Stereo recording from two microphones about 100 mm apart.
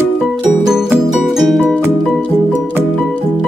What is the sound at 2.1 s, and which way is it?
Music, 15° left (ahead or behind).